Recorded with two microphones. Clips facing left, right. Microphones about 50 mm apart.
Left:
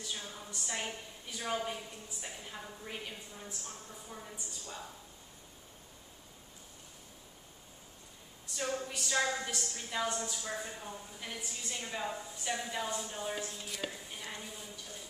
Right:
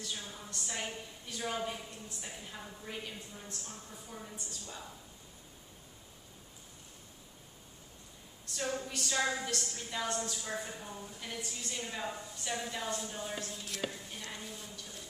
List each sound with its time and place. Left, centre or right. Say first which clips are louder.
0.0 s a woman's voice: even; centre
8.5 s a woman's voice: even; centre